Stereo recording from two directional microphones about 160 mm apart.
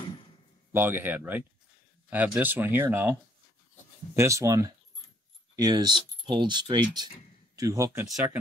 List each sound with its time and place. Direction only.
0.7 s speech: 15° right (ahead or behind)
8.0 s speech: 10° right (ahead or behind)